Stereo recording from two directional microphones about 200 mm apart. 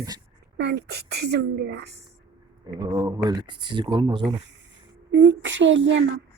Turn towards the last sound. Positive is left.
turn(degrees=-65)  # may be behind; listen again after turning